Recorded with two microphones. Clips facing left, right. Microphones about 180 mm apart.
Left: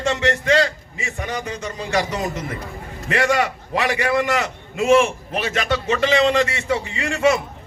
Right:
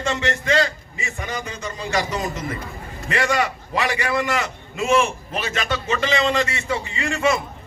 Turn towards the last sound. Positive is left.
turn(degrees=75)  # may be behind; listen again after turning